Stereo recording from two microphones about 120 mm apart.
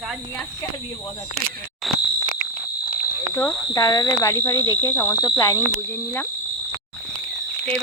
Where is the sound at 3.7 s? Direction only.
30° left (ahead or behind).